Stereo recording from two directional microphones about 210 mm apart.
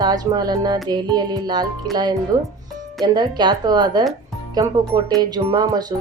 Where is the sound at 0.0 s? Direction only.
20° right (ahead or behind).